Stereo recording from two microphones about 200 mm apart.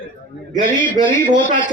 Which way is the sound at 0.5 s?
40° right (ahead or behind).